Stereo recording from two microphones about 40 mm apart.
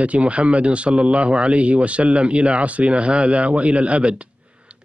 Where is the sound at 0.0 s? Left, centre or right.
Right.